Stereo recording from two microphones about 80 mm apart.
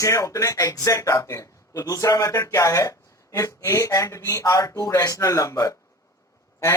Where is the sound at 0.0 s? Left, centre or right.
Left.